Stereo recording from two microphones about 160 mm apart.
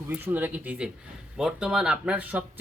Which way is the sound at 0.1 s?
10° right (ahead or behind).